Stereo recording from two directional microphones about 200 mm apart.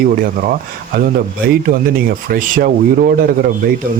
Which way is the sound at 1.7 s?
45° right (ahead or behind).